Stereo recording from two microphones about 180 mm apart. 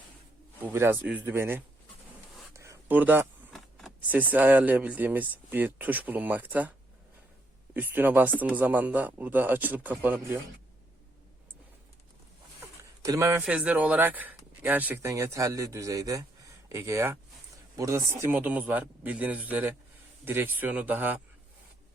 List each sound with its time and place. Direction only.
0.6 s speech: 10° right (ahead or behind)
2.5 s a sound: 15° right (ahead or behind)
3.5 s speech: centre (ahead or behind)
13.0 s a man's voice: 15° right (ahead or behind)